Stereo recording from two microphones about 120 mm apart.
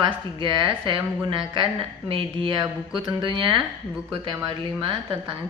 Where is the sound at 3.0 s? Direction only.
40° right (ahead or behind).